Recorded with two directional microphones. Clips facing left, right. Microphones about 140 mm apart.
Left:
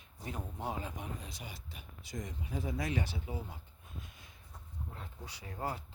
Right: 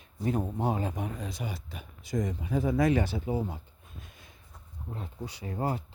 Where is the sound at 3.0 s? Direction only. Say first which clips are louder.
Right 11 dB; 45° right (ahead or behind).